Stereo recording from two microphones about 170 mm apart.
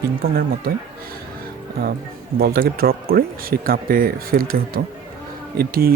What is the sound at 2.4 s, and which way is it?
Speech, 65° right (ahead or behind).